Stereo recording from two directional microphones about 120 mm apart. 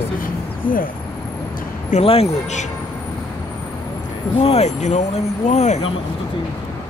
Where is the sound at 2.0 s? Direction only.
60° left (ahead or behind).